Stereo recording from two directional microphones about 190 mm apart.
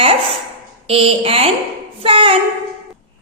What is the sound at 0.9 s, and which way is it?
A woman's voice, 30° right (ahead or behind).